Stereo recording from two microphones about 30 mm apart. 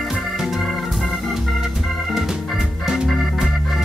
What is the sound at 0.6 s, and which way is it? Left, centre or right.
Organ, centre.